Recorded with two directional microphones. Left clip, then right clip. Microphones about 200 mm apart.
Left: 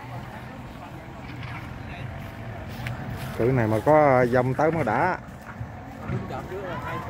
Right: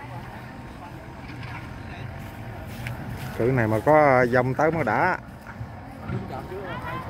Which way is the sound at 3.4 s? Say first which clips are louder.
Even; centre (ahead or behind).